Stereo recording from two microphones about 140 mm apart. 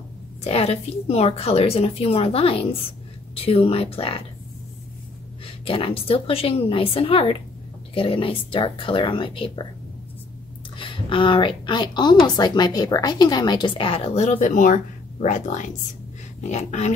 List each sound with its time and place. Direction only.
0.4 s a woman's voice: 50° left (ahead or behind)
5.7 s speech: 40° left (ahead or behind)
10.8 s a woman's voice: 40° left (ahead or behind); by 16.9 s 55° left (ahead or behind)